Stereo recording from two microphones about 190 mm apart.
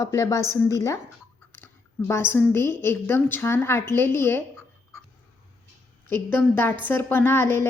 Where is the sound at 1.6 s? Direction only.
15° left (ahead or behind).